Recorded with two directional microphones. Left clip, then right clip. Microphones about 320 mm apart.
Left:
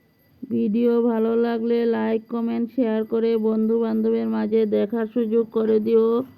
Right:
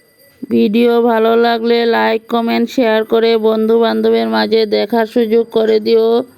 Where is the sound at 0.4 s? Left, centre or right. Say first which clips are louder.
Right 10 dB; right.